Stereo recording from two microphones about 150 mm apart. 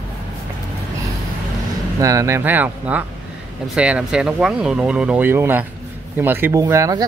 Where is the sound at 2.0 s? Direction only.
20° right (ahead or behind).